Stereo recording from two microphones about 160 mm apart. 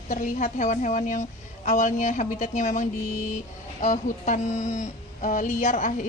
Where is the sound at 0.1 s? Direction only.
55° left (ahead or behind).